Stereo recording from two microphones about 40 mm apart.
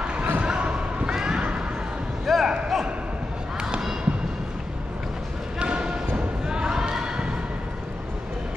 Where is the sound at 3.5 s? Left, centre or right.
Right.